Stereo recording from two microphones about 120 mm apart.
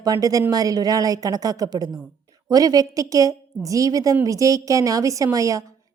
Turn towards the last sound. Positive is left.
turn(degrees=-25)  # may be behind; listen again after turning